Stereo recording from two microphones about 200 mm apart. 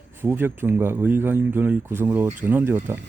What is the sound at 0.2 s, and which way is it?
Speech, 10° right (ahead or behind).